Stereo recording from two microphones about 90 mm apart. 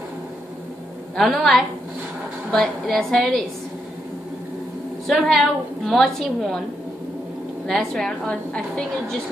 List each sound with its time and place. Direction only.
1.1 s a woman's voice: centre (ahead or behind)
5.0 s a woman's voice: centre (ahead or behind)
7.6 s a woman's voice: 5° left (ahead or behind)